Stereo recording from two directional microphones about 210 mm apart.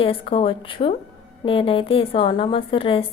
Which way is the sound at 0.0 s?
25° left (ahead or behind).